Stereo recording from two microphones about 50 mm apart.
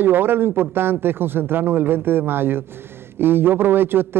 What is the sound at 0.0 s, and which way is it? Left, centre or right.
A man's voice, right.